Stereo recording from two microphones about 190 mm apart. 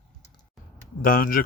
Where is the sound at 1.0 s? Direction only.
50° left (ahead or behind).